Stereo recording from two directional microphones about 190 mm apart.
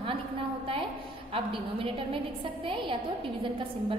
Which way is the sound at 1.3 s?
30° right (ahead or behind).